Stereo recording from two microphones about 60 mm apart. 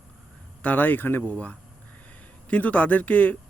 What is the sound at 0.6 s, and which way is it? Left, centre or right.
Speech, left.